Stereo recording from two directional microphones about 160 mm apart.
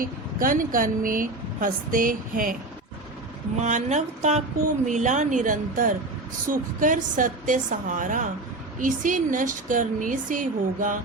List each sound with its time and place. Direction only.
0.0 s speech: 60° right (ahead or behind)
3.6 s a woman's voice: 50° right (ahead or behind)